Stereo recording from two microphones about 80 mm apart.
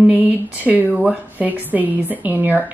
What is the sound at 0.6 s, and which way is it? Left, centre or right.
A woman's voice, centre.